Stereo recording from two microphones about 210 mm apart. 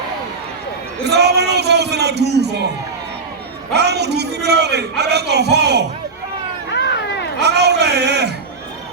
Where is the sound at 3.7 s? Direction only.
50° right (ahead or behind).